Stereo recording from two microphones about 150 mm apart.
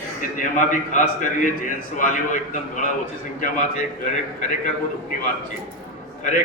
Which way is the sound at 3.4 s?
55° left (ahead or behind).